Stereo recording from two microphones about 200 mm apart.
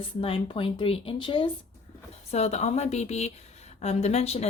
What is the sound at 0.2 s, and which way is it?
Speech, 25° left (ahead or behind).